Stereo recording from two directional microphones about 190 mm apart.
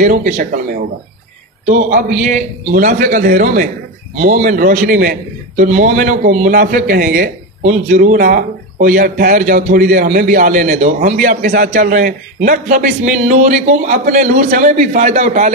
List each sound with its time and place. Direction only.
0.0 s a man's voice: 45° right (ahead or behind)